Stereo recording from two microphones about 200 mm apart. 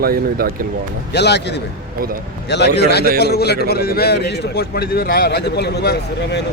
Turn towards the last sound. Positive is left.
turn(degrees=55)  # may be behind; listen again after turning